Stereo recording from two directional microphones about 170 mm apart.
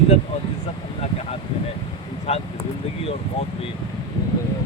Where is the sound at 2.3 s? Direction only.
40° left (ahead or behind).